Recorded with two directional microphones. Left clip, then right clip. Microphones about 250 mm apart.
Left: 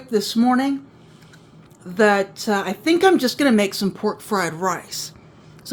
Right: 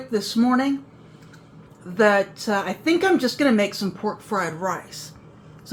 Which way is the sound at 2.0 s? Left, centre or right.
Left.